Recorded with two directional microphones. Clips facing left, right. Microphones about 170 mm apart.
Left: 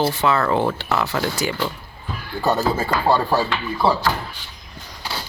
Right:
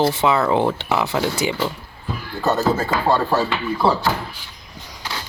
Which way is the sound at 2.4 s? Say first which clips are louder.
Right 1 dB; 15° left (ahead or behind).